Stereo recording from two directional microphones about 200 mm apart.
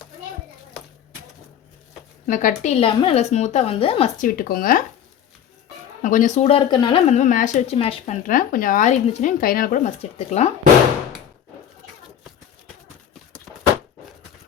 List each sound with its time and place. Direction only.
2.2 s speech: 40° left (ahead or behind)
2.8 s speech: 25° left (ahead or behind)
4.2 s speech: 45° left (ahead or behind)
6.0 s speech: 40° left (ahead or behind)